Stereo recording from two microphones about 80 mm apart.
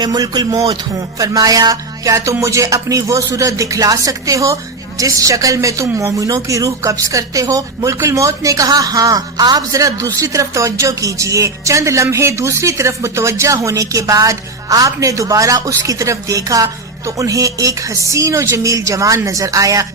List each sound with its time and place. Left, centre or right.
0.0 s a woman's voice: right